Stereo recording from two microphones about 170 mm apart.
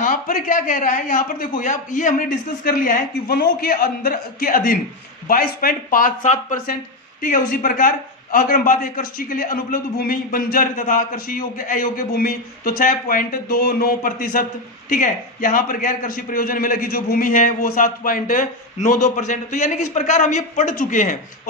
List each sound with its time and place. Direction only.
0.0 s a man's voice: 50° left (ahead or behind)